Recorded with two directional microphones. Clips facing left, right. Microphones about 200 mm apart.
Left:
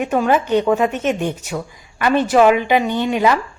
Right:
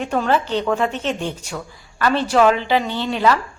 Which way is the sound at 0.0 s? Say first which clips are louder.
Left 3 dB; 10° left (ahead or behind).